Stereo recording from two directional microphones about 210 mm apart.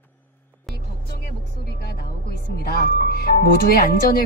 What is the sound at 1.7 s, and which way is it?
Speech, 50° left (ahead or behind).